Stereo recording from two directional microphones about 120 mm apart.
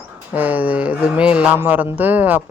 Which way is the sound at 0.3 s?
15° right (ahead or behind).